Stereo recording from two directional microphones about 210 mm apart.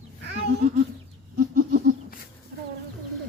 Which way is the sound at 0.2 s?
50° right (ahead or behind).